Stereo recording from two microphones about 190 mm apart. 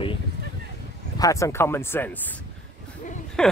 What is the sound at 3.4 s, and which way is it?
Speech, 5° left (ahead or behind).